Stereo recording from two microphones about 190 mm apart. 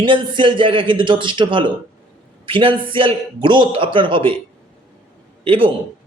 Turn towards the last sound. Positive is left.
turn(degrees=-25)  # may be behind; listen again after turning